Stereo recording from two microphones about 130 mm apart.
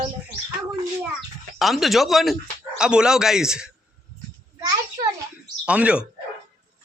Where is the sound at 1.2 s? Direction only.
Centre (ahead or behind).